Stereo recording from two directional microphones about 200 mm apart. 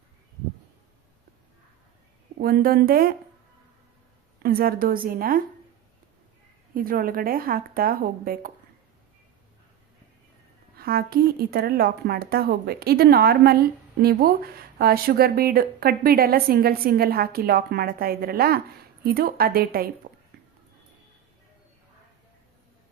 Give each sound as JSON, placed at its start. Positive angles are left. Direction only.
{"t": 2.4, "sound": "speech", "side_deg": -50}
{"t": 4.4, "sound": "speech", "side_deg": -50}
{"t": 6.7, "sound": "speech", "side_deg": -45}
{"t": 10.8, "sound": "speech", "side_deg": -50}